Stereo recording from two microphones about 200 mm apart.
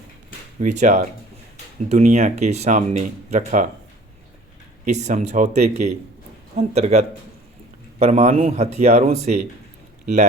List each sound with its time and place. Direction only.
0.6 s speech: 35° right (ahead or behind)
4.9 s speech: 35° right (ahead or behind)